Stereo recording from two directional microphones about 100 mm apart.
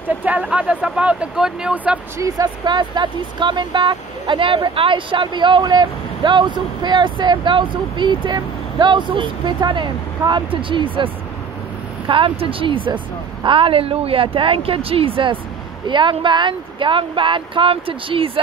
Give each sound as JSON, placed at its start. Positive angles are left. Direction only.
{"t": 0.2, "sound": "speech", "side_deg": -10}
{"t": 2.1, "sound": "speech", "side_deg": -35}
{"t": 12.1, "sound": "speech", "side_deg": -60}